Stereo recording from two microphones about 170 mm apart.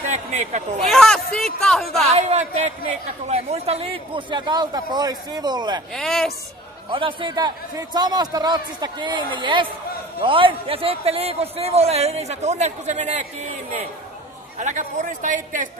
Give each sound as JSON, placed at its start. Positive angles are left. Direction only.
{"t": 0.1, "sound": "a sound", "side_deg": -45}
{"t": 0.8, "sound": "a man's voice", "side_deg": 5}
{"t": 2.1, "sound": "a man's voice", "side_deg": -40}
{"t": 5.9, "sound": "a man's voice", "side_deg": 0}
{"t": 6.9, "sound": "a man's voice", "side_deg": -30}
{"t": 14.6, "sound": "a man's voice", "side_deg": -45}